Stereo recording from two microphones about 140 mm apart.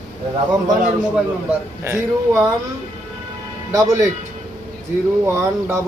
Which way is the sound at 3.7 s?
25° right (ahead or behind).